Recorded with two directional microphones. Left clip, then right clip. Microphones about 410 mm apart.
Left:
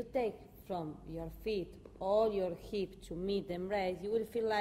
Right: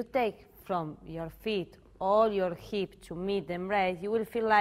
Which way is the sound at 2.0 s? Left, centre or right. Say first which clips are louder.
Right 6 dB; right.